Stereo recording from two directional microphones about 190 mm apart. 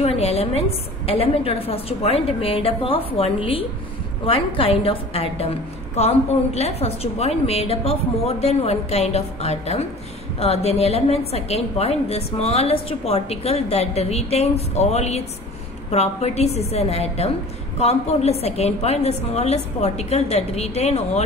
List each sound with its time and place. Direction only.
0.0 s a woman's voice: 30° left (ahead or behind)